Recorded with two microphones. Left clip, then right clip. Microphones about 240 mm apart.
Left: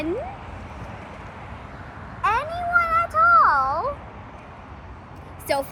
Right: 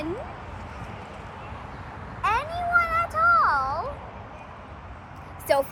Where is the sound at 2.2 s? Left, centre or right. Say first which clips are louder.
Left 2 dB; centre.